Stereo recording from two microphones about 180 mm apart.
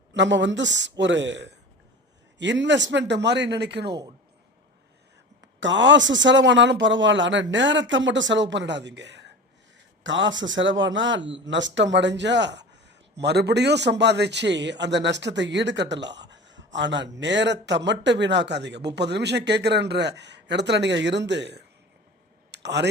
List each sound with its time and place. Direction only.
0.1 s a man's voice: 85° right
5.5 s speech: 90° right; by 9.3 s 75° right (ahead or behind)
10.0 s a man's voice: 90° right; by 22.9 s 70° right (ahead or behind)